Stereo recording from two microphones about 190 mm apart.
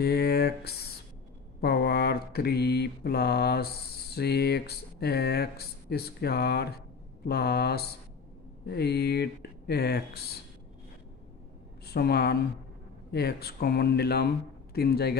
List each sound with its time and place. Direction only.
0.0 s a sound: 60° left (ahead or behind)
1.6 s mantra: 55° left (ahead or behind)
7.2 s speech: 55° left (ahead or behind)
11.8 s speech: 55° left (ahead or behind)